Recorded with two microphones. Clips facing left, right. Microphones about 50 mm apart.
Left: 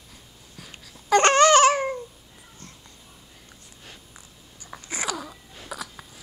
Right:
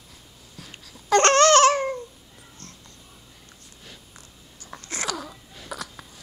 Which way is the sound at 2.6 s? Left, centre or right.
Centre.